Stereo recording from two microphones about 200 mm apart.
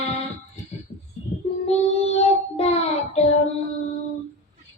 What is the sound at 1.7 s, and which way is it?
Child singing, 30° left (ahead or behind).